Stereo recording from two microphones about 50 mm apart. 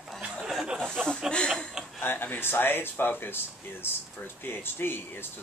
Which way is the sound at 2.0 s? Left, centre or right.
Left.